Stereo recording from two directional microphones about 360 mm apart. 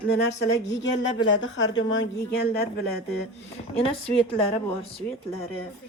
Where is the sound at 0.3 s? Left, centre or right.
Left.